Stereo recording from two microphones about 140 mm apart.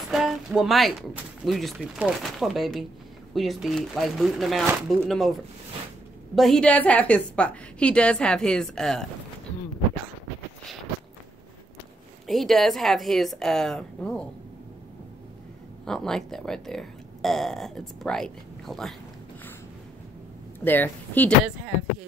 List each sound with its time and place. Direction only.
0.1 s speech: 5° right (ahead or behind)
6.3 s a woman's voice: centre (ahead or behind)
12.3 s speech: centre (ahead or behind)
15.8 s speech: 5° left (ahead or behind)
20.6 s a woman's voice: 15° left (ahead or behind)